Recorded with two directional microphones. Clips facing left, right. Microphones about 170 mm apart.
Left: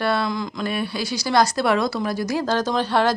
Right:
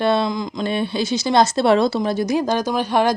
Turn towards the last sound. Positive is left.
turn(degrees=-15)  # may be behind; listen again after turning